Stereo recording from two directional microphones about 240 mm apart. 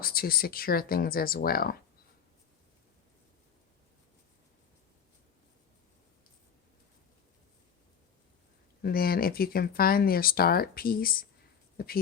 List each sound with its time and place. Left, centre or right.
0.0 s speech: left
8.8 s speech: left